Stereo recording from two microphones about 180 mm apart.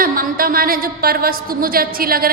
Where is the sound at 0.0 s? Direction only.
50° right (ahead or behind).